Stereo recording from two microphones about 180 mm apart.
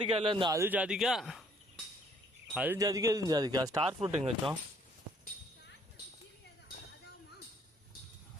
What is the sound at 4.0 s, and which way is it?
Speech, 35° right (ahead or behind).